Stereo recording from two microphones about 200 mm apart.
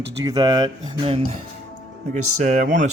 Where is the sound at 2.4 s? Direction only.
35° right (ahead or behind).